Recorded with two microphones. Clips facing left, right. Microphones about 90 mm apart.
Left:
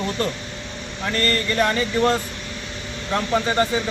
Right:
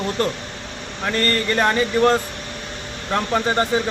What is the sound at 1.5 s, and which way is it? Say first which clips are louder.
Speech: right 3 dB; 40° right (ahead or behind).